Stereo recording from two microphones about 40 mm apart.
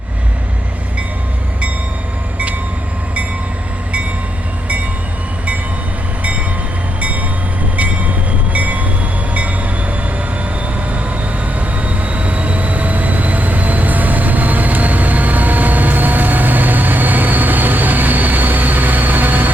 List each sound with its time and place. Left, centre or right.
7.0 s train: right
11.6 s vehicle: right